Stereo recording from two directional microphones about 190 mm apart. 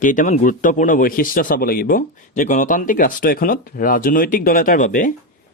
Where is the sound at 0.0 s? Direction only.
45° left (ahead or behind).